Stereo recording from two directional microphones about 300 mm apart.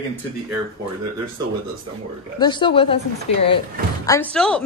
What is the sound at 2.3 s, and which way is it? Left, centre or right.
Speech, centre.